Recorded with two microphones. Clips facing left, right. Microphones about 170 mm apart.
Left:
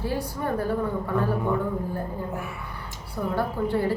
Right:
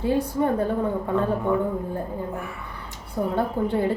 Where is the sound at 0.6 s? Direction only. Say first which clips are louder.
Right 2 dB; 25° right (ahead or behind).